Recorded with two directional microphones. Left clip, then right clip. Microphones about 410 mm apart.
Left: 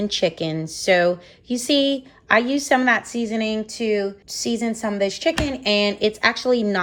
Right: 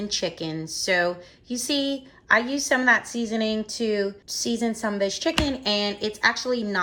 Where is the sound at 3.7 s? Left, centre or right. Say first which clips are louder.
Left 4 dB; right.